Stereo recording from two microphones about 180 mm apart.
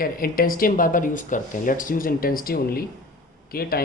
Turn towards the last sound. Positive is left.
turn(degrees=55)  # may be behind; listen again after turning